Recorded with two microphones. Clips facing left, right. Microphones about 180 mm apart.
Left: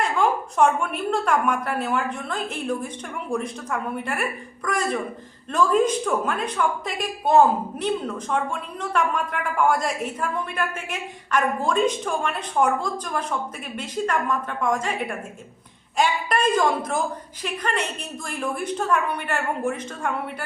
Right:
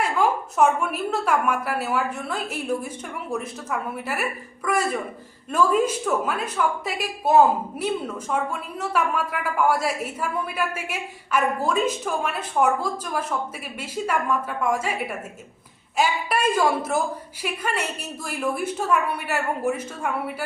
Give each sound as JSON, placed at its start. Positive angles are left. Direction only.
{"t": 0.0, "sound": "a woman's voice", "side_deg": -5}